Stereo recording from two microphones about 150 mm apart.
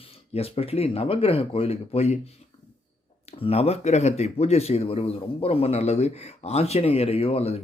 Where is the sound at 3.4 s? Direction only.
40° left (ahead or behind).